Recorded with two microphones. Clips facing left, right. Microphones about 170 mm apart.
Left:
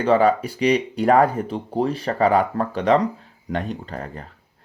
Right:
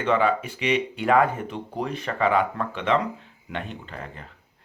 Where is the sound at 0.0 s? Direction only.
40° left (ahead or behind).